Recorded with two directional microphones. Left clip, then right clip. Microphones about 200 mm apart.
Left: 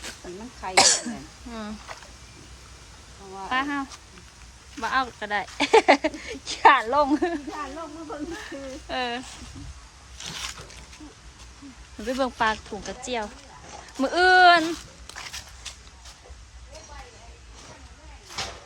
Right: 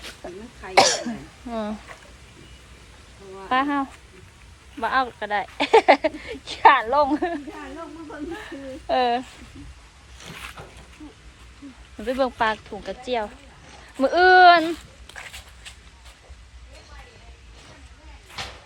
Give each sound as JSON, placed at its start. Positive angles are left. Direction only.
{"t": 0.2, "sound": "cough", "side_deg": 5}
{"t": 0.7, "sound": "speech", "side_deg": 10}
{"t": 3.5, "sound": "speech", "side_deg": 0}
{"t": 12.2, "sound": "speech", "side_deg": 15}